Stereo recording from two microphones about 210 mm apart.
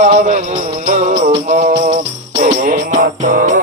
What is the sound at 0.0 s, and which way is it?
Music, 35° right (ahead or behind).